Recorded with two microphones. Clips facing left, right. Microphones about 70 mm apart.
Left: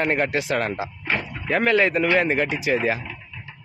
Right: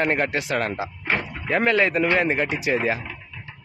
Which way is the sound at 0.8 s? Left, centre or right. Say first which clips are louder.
Right 1 dB; right.